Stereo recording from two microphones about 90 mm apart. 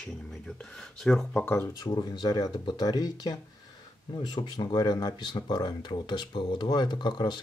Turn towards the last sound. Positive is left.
turn(degrees=55)  # may be behind; listen again after turning